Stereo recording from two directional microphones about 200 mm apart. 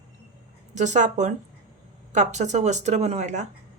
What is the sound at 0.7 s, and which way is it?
A woman's voice, 35° right (ahead or behind).